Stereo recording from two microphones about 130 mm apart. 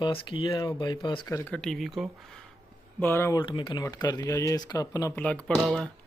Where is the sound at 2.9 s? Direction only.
20° left (ahead or behind).